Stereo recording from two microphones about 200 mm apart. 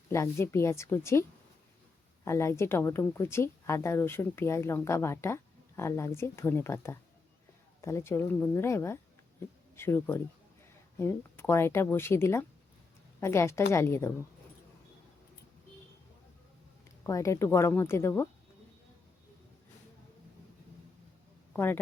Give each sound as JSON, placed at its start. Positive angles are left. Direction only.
{"t": 0.1, "sound": "speech", "side_deg": 15}
{"t": 2.2, "sound": "speech", "side_deg": 15}
{"t": 17.0, "sound": "speech", "side_deg": 15}
{"t": 21.5, "sound": "speech", "side_deg": 10}